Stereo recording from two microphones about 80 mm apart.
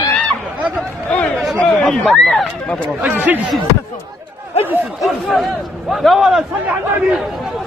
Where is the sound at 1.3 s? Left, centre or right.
Centre.